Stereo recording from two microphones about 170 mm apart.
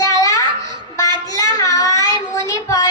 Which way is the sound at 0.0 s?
20° left (ahead or behind).